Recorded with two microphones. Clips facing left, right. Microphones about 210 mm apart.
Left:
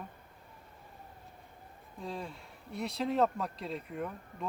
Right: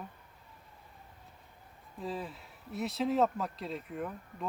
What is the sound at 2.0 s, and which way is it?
Speech, 5° right (ahead or behind).